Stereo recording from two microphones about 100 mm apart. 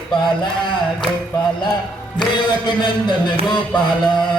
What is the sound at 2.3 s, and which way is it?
Music, 50° left (ahead or behind).